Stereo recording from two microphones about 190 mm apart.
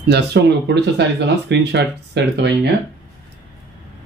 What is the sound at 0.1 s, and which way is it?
Speech, 65° right (ahead or behind).